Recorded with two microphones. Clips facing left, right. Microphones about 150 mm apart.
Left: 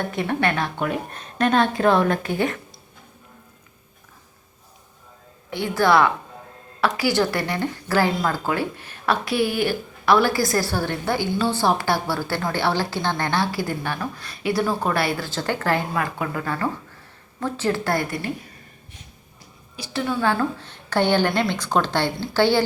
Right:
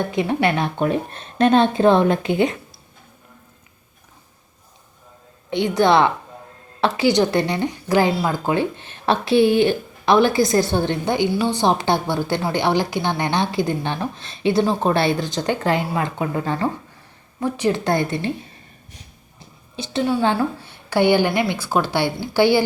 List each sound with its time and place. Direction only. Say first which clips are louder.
0.2 s a woman's voice: right 3 dB; 15° right (ahead or behind)
5.5 s a woman's voice: right 3 dB; 20° right (ahead or behind)
19.4 s a woman's voice: right 6 dB; 25° right (ahead or behind)